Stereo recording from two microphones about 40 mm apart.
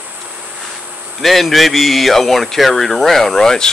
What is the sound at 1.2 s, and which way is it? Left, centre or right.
Speech, centre.